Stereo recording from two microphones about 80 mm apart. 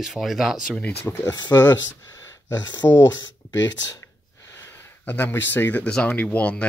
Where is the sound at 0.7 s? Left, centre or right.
Centre.